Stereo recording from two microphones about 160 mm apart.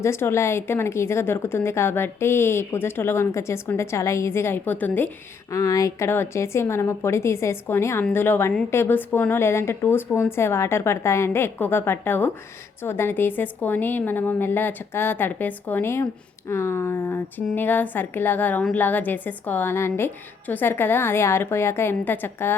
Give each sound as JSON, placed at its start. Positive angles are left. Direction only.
{"t": 0.0, "sound": "a woman's voice", "side_deg": 15}